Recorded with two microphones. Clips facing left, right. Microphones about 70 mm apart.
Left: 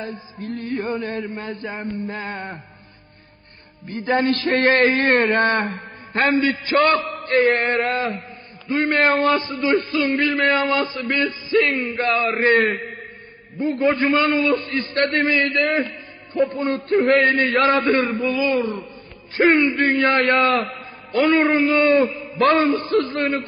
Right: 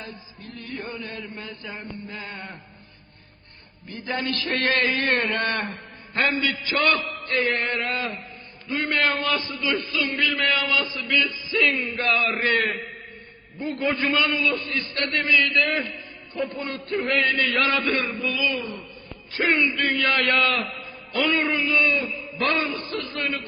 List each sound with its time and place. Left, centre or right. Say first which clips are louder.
0.0 s a man's voice: left 9 dB; left
3.8 s a man's voice: left 9 dB; left